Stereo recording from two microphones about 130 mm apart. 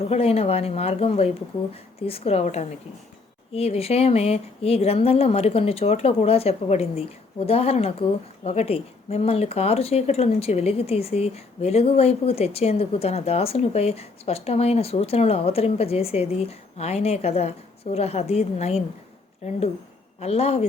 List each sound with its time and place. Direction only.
0.0 s speech: 50° left (ahead or behind)